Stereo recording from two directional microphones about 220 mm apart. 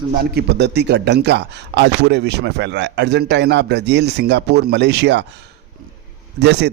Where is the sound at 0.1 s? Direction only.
45° right (ahead or behind).